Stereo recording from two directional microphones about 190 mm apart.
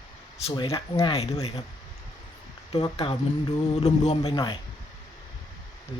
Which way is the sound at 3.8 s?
35° left (ahead or behind).